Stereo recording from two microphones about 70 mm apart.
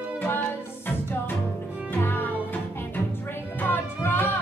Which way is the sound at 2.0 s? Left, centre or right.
Left.